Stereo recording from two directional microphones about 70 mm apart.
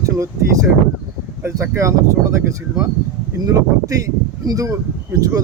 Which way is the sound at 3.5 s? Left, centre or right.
Right.